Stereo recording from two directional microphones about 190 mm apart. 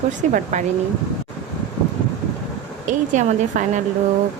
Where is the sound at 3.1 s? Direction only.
40° right (ahead or behind).